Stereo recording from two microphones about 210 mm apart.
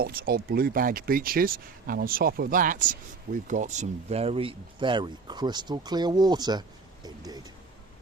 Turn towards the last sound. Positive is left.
turn(degrees=-20)  # may be behind; listen again after turning